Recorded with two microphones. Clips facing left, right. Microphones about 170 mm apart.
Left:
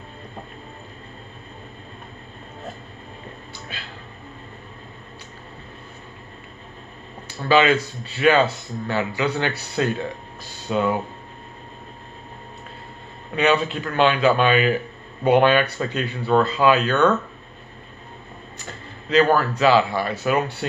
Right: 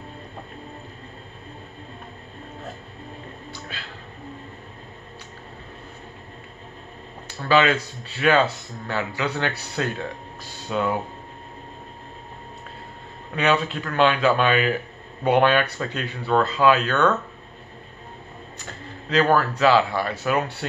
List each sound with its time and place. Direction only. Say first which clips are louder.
7.4 s speech: left 2 dB; 5° left (ahead or behind)
13.4 s speech: left 2 dB; 5° left (ahead or behind)
19.0 s speech: left 2 dB; 5° left (ahead or behind)